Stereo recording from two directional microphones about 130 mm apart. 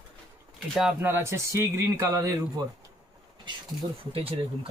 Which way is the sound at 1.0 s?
20° right (ahead or behind).